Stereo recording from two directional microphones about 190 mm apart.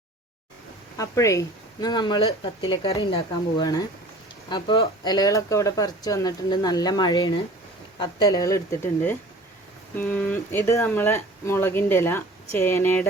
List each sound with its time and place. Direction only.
0.9 s speech: 15° left (ahead or behind)